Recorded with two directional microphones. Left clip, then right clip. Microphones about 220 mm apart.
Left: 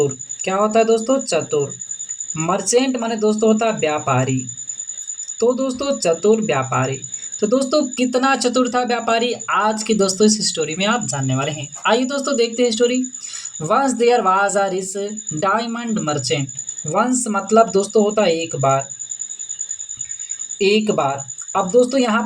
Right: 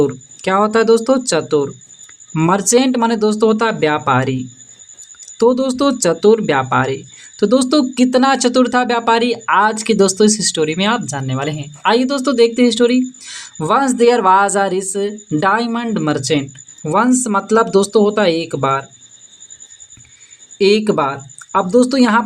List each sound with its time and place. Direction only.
0.5 s speech: 40° right (ahead or behind)
5.4 s speech: 40° right (ahead or behind)
20.6 s speech: 40° right (ahead or behind)